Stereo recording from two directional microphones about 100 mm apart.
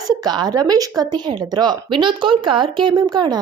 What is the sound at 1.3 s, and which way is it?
Speech, 50° right (ahead or behind).